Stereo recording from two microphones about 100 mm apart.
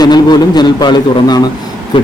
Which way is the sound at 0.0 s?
45° left (ahead or behind).